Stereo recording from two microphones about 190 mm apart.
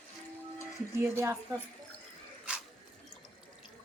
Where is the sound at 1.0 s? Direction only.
15° right (ahead or behind).